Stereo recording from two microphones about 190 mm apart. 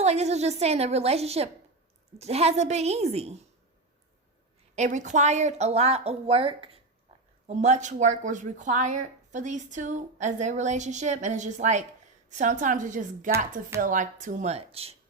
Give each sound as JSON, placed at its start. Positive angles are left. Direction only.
{"t": 0.0, "sound": "a woman's voice", "side_deg": -35}
{"t": 4.7, "sound": "a woman's voice", "side_deg": -40}